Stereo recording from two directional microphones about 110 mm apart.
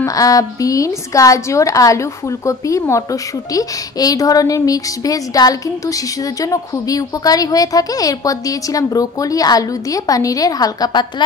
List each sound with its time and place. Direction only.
0.0 s a woman's voice: 30° left (ahead or behind)